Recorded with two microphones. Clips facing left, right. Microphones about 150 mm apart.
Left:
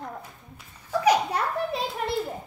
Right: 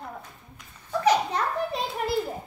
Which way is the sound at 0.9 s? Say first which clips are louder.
Left 1 dB; 10° left (ahead or behind).